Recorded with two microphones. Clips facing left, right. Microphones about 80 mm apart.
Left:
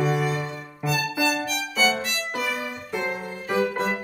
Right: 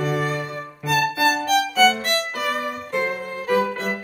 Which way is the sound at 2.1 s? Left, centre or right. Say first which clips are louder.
Right 5 dB; right.